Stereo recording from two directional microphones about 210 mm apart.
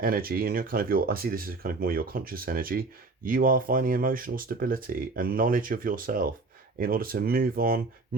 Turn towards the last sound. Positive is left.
turn(degrees=-45)  # may be behind; listen again after turning